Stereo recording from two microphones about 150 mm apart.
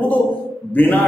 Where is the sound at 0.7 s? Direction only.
10° left (ahead or behind).